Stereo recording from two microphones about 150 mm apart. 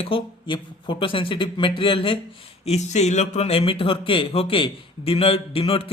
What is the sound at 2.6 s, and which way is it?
A man's voice, 50° left (ahead or behind).